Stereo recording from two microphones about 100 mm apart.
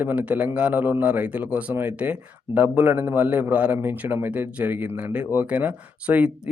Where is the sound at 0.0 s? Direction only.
15° right (ahead or behind).